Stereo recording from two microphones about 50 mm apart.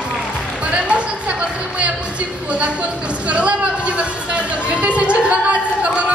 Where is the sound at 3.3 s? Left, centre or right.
Right.